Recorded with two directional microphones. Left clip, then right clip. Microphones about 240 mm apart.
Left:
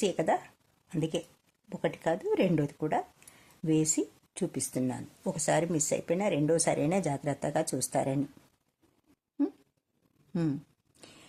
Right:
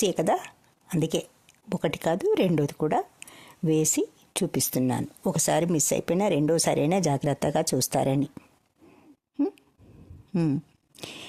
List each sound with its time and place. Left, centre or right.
0.0 s speech: right
10.3 s speech: right
11.0 s scrape: right